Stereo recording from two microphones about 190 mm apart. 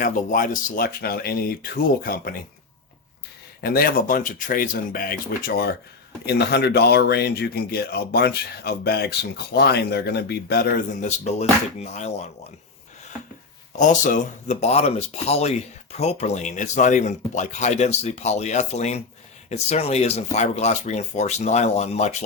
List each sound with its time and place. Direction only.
0.0 s speech: 45° left (ahead or behind)
3.6 s speech: 55° left (ahead or behind)
11.2 s speech: 35° left (ahead or behind)
13.7 s speech: 40° left (ahead or behind)